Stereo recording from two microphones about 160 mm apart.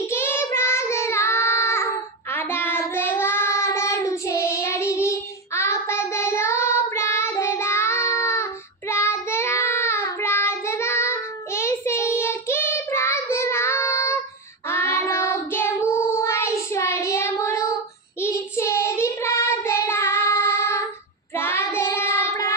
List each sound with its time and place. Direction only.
0.1 s child singing: 15° left (ahead or behind)